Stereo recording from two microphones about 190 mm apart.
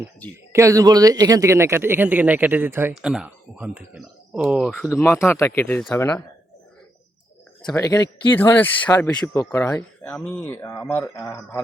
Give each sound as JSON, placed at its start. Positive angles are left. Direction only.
{"t": 0.5, "sound": "speech", "side_deg": -15}
{"t": 4.9, "sound": "speech", "side_deg": 15}
{"t": 7.7, "sound": "speech", "side_deg": 20}